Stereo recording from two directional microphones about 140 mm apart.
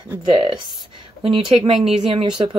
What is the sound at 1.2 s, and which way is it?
Speech, 40° right (ahead or behind).